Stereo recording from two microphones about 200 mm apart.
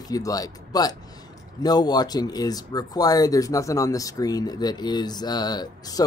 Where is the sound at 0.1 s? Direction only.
20° left (ahead or behind).